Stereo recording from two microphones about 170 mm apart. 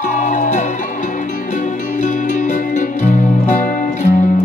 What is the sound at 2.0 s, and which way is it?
Music, 45° left (ahead or behind).